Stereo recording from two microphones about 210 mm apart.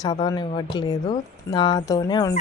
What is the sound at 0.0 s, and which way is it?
Speech, 20° left (ahead or behind).